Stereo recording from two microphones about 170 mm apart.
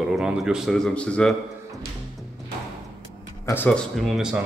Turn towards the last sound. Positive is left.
turn(degrees=-5)  # may be behind; listen again after turning